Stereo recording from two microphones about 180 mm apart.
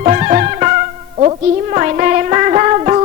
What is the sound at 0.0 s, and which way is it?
Music, 40° right (ahead or behind).